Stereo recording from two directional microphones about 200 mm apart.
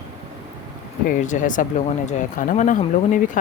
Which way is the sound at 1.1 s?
40° left (ahead or behind).